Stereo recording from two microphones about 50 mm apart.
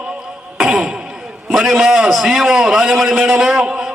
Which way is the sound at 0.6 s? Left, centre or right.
Centre.